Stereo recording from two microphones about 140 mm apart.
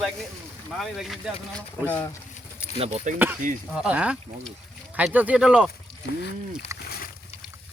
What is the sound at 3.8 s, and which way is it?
Speech, 10° right (ahead or behind).